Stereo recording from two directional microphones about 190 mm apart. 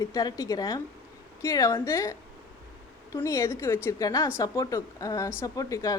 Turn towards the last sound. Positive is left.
turn(degrees=20)  # may be behind; listen again after turning